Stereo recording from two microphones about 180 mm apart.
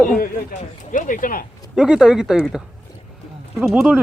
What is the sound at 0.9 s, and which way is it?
Speech, 50° left (ahead or behind).